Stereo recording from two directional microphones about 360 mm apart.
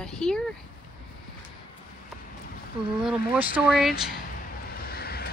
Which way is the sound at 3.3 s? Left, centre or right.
Centre.